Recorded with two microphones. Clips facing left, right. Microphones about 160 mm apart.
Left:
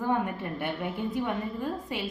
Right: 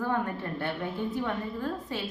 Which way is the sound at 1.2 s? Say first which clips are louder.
Left 1 dB; 15° left (ahead or behind).